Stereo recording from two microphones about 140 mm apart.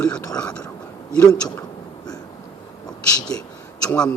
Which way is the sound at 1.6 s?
25° left (ahead or behind).